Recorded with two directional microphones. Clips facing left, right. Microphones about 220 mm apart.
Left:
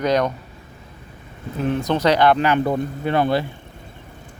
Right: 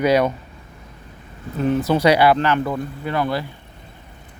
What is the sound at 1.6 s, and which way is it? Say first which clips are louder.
Speech: right 2 dB; centre (ahead or behind).